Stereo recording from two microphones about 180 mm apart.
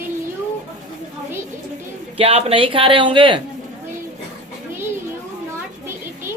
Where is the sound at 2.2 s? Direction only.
35° right (ahead or behind).